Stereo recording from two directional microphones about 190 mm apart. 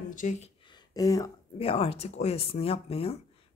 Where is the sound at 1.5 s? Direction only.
30° left (ahead or behind).